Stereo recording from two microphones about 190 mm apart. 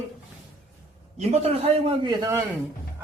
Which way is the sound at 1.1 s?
35° right (ahead or behind).